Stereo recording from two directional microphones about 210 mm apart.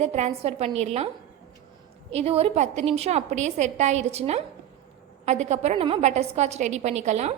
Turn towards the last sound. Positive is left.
turn(degrees=-30)  # may be behind; listen again after turning